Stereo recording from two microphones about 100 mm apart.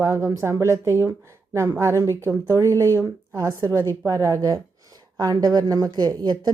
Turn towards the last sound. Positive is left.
turn(degrees=-40)  # may be behind; listen again after turning